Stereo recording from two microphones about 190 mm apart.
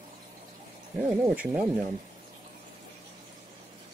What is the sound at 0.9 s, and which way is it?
Speech, 10° right (ahead or behind).